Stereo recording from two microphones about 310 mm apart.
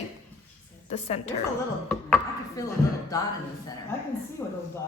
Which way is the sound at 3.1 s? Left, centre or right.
Centre.